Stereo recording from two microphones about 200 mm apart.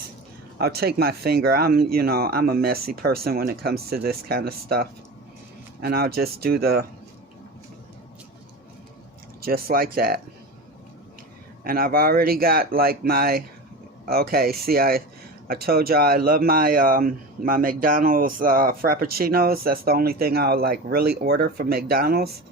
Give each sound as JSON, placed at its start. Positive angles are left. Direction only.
{"t": 0.6, "sound": "speech", "side_deg": -50}
{"t": 9.4, "sound": "speech", "side_deg": -50}
{"t": 11.6, "sound": "speech", "side_deg": -50}